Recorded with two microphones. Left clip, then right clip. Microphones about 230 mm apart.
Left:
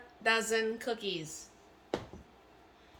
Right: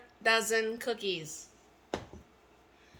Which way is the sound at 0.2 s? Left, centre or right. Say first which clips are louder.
Right 2 dB; right.